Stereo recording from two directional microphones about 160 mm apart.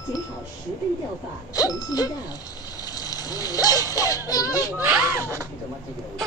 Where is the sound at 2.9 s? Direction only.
25° left (ahead or behind).